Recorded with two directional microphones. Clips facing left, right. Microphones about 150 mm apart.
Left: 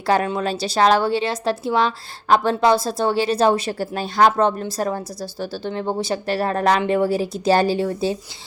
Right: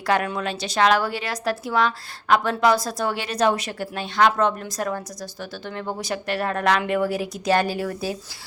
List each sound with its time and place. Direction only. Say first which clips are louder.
0.0 s a woman's voice: left 3 dB; 25° left (ahead or behind)